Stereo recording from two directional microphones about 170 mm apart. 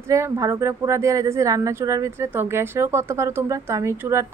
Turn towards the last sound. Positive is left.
turn(degrees=-15)  # may be behind; listen again after turning